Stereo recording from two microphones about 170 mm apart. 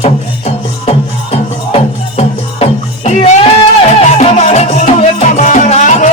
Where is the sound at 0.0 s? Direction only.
40° left (ahead or behind).